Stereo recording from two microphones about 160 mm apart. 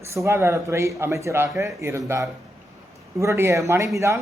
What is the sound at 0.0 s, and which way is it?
A man's voice, 15° right (ahead or behind).